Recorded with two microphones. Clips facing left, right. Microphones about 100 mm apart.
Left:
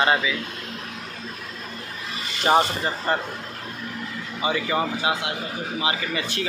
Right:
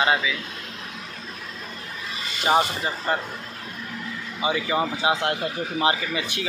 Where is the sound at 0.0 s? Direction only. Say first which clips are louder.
Left 1 dB; centre (ahead or behind).